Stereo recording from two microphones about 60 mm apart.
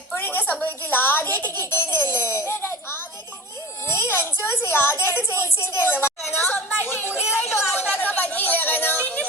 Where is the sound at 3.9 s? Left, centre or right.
Left.